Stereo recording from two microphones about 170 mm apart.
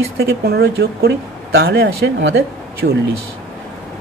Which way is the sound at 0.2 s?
70° right (ahead or behind).